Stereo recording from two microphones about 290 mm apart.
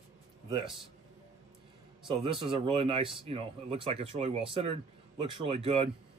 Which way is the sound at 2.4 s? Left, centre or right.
Centre.